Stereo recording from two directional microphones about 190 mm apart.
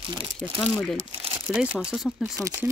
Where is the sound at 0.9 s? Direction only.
30° right (ahead or behind).